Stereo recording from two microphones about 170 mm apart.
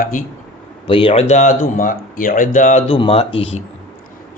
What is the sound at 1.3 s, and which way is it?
Speech, 50° left (ahead or behind).